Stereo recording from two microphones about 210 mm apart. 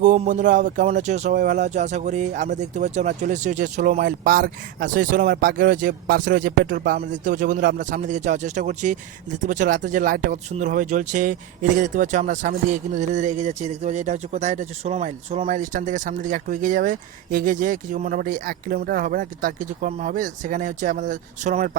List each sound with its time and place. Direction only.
0.0 s speech: 40° right (ahead or behind)